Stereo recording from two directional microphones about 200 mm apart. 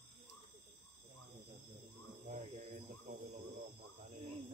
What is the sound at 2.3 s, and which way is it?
Cricket, 35° right (ahead or behind).